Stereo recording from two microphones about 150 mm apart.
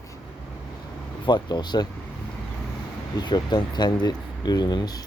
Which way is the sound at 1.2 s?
30° left (ahead or behind).